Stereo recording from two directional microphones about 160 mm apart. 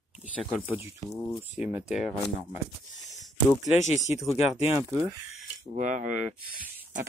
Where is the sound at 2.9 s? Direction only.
45° left (ahead or behind).